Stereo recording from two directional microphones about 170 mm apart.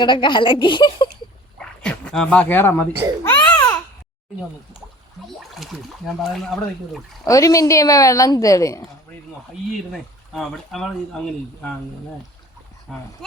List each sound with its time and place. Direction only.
0.0 s speech: 25° left (ahead or behind)
1.5 s dog: 5° left (ahead or behind)
3.2 s babbling: 15° left (ahead or behind)
5.4 s speech: centre (ahead or behind)
7.3 s speech: 20° left (ahead or behind)
9.9 s speech: centre (ahead or behind)
12.9 s speech: 5° left (ahead or behind)